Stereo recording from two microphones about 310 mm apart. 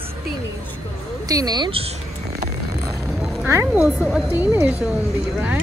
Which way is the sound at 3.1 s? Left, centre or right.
Centre.